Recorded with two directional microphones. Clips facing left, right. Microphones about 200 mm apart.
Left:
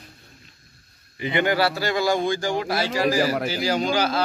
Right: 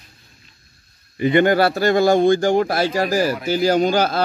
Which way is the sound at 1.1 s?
45° right (ahead or behind).